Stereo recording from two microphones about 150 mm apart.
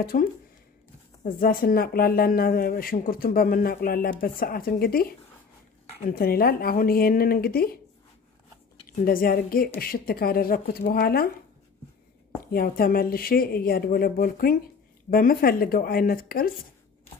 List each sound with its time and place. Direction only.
0.0 s speech: 75° left (ahead or behind); by 7.8 s 90° left
8.8 s speech: 70° left (ahead or behind)
12.5 s speech: 75° left (ahead or behind)